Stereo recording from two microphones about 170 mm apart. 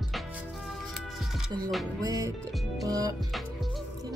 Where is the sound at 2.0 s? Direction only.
20° right (ahead or behind).